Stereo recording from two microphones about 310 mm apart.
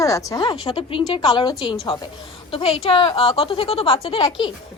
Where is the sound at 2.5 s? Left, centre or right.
Centre.